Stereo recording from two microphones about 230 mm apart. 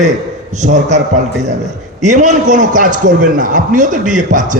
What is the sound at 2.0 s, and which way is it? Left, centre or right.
A man's voice, right.